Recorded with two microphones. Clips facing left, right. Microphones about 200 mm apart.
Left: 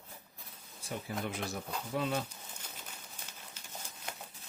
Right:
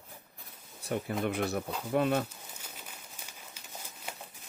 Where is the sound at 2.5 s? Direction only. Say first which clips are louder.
Right 1 dB; 10° right (ahead or behind).